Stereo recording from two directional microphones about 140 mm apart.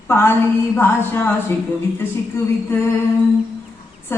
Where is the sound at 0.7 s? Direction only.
15° left (ahead or behind).